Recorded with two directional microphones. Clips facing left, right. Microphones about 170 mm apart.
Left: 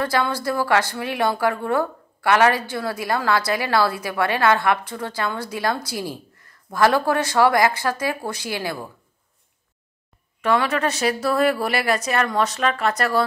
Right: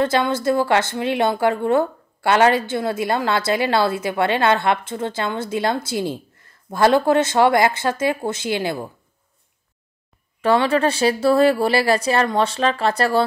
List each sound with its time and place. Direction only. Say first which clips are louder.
0.0 s speech: right 4 dB; 25° right (ahead or behind)
10.4 s speech: right 4 dB; 30° right (ahead or behind)